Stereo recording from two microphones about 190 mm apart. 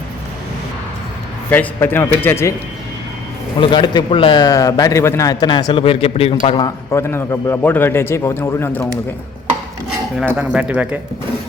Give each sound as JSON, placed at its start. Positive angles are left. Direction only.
{"t": 1.5, "sound": "a man's voice", "side_deg": 10}
{"t": 3.6, "sound": "a man's voice", "side_deg": 25}
{"t": 10.2, "sound": "speech", "side_deg": 0}